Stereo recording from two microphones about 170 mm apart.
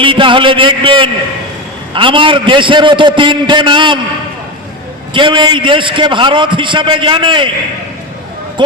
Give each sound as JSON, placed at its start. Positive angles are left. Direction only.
{"t": 0.0, "sound": "a man's voice", "side_deg": -30}
{"t": 5.1, "sound": "a man's voice", "side_deg": -30}